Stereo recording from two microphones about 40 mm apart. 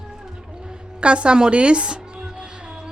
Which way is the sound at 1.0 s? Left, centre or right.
Right.